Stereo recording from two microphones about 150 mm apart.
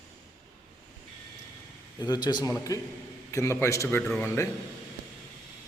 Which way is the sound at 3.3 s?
20° left (ahead or behind).